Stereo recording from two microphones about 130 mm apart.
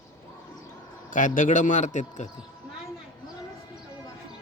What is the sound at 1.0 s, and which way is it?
A man's voice, 85° left.